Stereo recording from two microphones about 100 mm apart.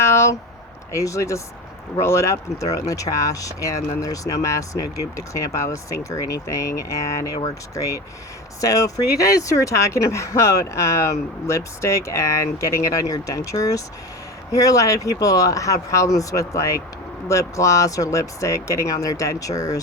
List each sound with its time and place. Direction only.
0.0 s a sound: 30° left (ahead or behind)
0.9 s speech: 30° left (ahead or behind)
7.4 s speech: 35° left (ahead or behind)